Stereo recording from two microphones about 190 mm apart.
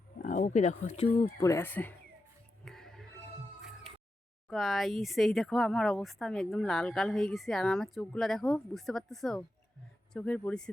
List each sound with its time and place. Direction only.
0.2 s speech: 45° left (ahead or behind)
1.4 s speech: 15° left (ahead or behind)
2.6 s music: centre (ahead or behind)
4.4 s speech: centre (ahead or behind)